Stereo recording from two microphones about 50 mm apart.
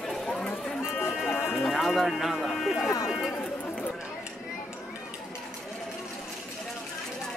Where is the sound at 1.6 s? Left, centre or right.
Centre.